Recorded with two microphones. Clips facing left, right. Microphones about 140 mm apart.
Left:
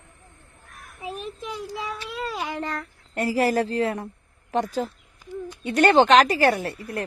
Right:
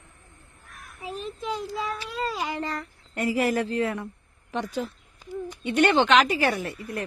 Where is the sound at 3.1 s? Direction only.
35° left (ahead or behind).